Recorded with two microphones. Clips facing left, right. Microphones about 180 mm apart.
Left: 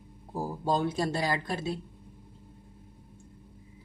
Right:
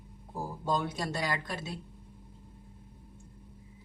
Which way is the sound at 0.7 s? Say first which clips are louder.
Left 4 dB; 30° left (ahead or behind).